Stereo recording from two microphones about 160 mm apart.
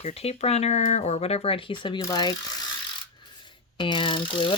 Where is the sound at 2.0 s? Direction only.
25° left (ahead or behind).